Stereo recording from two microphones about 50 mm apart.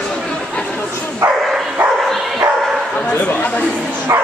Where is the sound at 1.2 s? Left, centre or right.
Right.